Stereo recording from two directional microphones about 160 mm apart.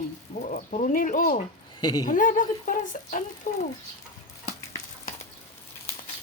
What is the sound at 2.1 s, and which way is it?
Speech, 55° left (ahead or behind).